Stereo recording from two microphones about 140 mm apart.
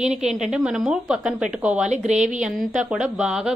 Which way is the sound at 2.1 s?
60° right (ahead or behind).